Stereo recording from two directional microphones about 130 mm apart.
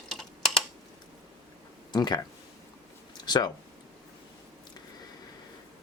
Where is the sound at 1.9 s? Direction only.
35° left (ahead or behind).